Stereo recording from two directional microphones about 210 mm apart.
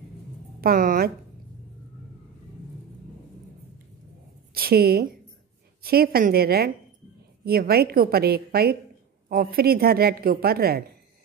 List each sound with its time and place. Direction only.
0.6 s a woman's voice: 40° right (ahead or behind)
4.6 s a woman's voice: 45° right (ahead or behind)